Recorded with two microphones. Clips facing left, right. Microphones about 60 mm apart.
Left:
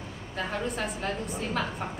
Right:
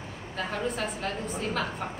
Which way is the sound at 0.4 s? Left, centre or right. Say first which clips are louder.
Even; centre.